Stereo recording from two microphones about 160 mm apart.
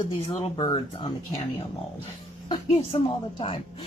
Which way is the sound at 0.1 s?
35° left (ahead or behind).